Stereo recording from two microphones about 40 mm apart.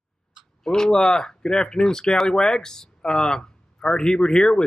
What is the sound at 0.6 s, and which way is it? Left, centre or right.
Speech, centre.